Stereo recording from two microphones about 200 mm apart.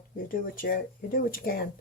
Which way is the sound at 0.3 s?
45° left (ahead or behind).